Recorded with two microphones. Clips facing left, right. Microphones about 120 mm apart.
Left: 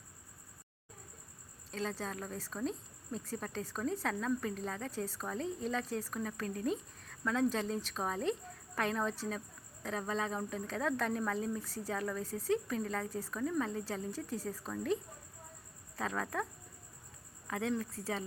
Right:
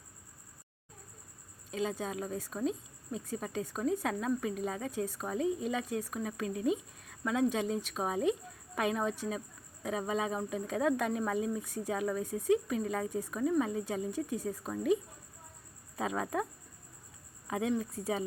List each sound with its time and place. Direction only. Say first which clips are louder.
1.7 s a woman's voice: right 4 dB; 10° right (ahead or behind)
16.0 s speech: right 3 dB; 15° right (ahead or behind)
17.5 s speech: right 3 dB; 15° right (ahead or behind)